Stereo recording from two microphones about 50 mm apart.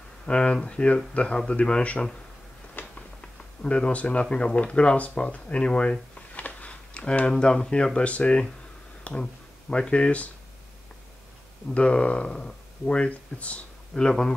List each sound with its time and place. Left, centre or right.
0.3 s speech: left
2.8 s a sound: left
3.2 s speech: left
11.7 s speech: left
13.9 s speech: centre